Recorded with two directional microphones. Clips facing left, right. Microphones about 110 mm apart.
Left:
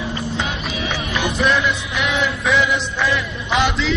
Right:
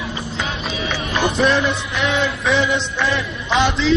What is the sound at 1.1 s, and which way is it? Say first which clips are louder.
Speech: right 3 dB; 30° right (ahead or behind).